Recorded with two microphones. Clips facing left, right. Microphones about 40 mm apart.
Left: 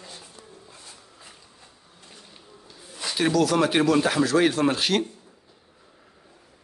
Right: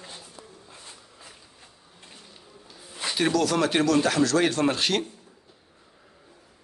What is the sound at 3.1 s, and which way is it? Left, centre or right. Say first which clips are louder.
A man's voice: left 2 dB; centre.